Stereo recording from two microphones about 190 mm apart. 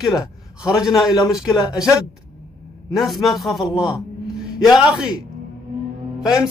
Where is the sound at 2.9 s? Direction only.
Centre (ahead or behind).